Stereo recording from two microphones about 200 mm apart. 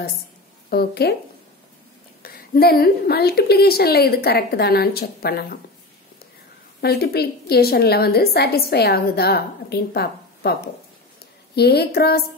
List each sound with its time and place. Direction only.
0.7 s speech: 50° left (ahead or behind)
2.2 s a woman's voice: 50° left (ahead or behind)
6.8 s a woman's voice: 50° left (ahead or behind)